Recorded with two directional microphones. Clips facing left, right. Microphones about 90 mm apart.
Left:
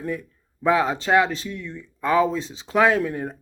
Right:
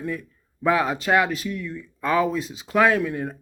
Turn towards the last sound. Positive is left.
turn(degrees=30)  # may be behind; listen again after turning